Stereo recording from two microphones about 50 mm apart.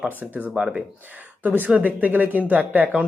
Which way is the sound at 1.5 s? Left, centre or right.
Right.